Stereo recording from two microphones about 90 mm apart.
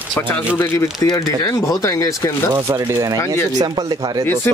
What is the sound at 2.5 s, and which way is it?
Speech, 35° right (ahead or behind).